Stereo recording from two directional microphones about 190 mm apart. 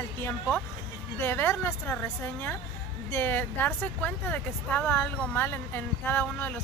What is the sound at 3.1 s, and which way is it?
Speech, 10° left (ahead or behind).